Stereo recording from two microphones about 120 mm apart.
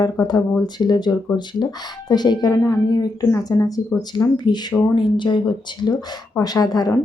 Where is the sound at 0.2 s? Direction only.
35° left (ahead or behind).